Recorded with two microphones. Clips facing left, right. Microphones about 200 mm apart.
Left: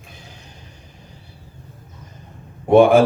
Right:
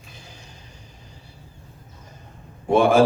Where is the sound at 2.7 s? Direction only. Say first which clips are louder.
Left 5 dB; 60° left (ahead or behind).